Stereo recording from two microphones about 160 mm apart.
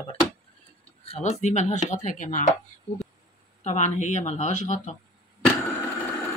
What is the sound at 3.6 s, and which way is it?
Speech, 45° left (ahead or behind).